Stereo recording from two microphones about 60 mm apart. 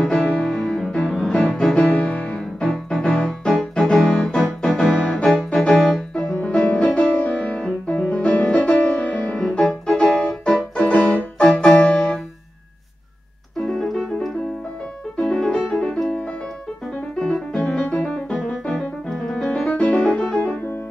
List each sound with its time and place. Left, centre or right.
0.0 s music: centre
4.4 s keyboard: centre
4.9 s music: centre
10.6 s music: left
11.4 s music: centre
13.7 s keyboard: centre
15.1 s music: centre
19.0 s piano: centre
19.7 s music: left